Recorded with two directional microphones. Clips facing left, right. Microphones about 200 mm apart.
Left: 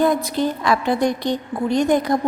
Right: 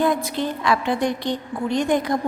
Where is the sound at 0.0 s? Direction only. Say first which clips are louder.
Left 3 dB; 40° left (ahead or behind).